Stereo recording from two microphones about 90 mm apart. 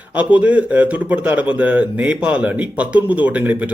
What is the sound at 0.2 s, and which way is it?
A man's voice, 15° right (ahead or behind).